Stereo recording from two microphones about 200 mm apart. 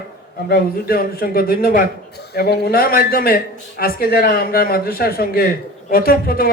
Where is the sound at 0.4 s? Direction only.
50° left (ahead or behind).